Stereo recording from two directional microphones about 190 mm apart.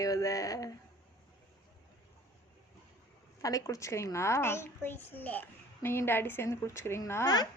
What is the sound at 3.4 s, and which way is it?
A child's voice, 15° left (ahead or behind).